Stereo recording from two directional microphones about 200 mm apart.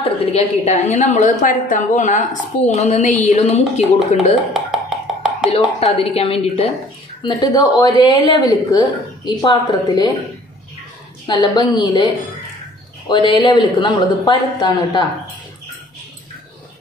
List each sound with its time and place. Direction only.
0.0 s a woman's voice: 30° left (ahead or behind)
4.6 s a sound: centre (ahead or behind)
5.8 s a woman's voice: 30° left (ahead or behind)
7.2 s a woman's voice: 20° left (ahead or behind)
11.2 s a woman's voice: 20° left (ahead or behind)
13.1 s a woman's voice: 25° left (ahead or behind)